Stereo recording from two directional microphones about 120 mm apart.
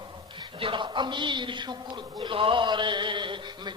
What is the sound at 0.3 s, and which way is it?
A man's voice, 40° right (ahead or behind).